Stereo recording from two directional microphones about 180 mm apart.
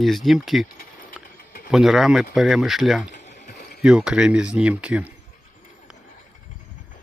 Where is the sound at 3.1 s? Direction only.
40° left (ahead or behind).